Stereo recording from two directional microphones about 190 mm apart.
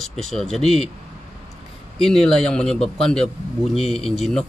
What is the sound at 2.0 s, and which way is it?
Speech, centre (ahead or behind).